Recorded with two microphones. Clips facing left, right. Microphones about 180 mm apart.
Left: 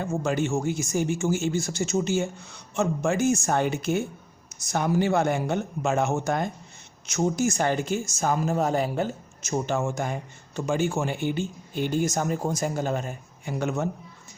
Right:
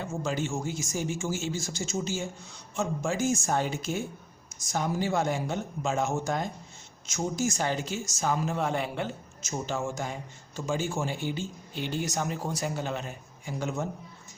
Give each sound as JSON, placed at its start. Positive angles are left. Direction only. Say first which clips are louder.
{"t": 0.0, "sound": "speech", "louder": "left 5 dB", "side_deg": 60}
{"t": 9.4, "sound": "speech", "louder": "left 6 dB", "side_deg": 60}